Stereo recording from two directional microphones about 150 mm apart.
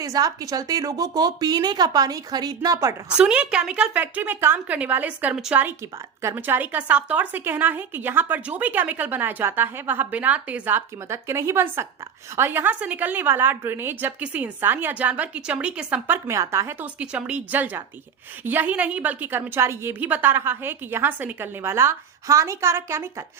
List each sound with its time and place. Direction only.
0.0 s a woman's voice: 25° right (ahead or behind)
3.2 s speech: 5° right (ahead or behind)